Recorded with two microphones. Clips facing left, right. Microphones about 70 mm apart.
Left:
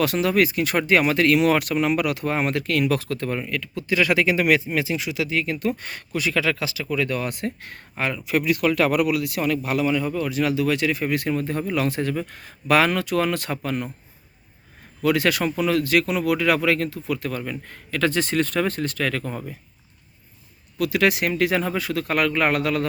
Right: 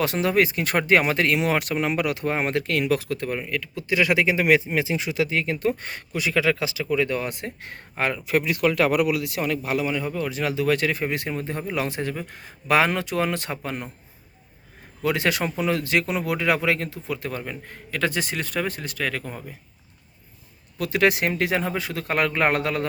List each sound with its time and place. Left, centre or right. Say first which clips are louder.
0.0 s speech: left 1 dB; right
8.0 s speech: left 1 dB; right
11.0 s speech: left 3 dB; right
15.0 s speech: left 3 dB; right; by 19.5 s centre
20.7 s speech: left 1 dB; right